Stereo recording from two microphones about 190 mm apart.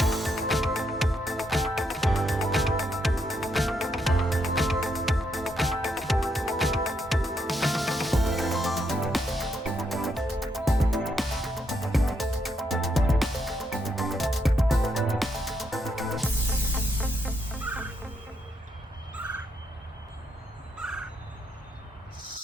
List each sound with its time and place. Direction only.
0.0 s music: centre (ahead or behind)